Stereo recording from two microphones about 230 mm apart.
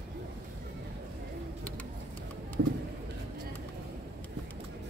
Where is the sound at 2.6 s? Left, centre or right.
Right.